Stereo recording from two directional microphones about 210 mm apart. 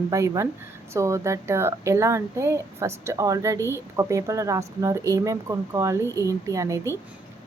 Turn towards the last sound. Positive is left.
turn(degrees=-15)  # may be behind; listen again after turning